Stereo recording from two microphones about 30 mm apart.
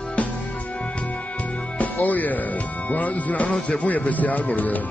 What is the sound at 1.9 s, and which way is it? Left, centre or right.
Music, left.